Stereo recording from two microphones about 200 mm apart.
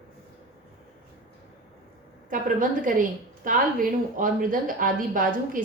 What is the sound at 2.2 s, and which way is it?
A woman's voice, 45° right (ahead or behind).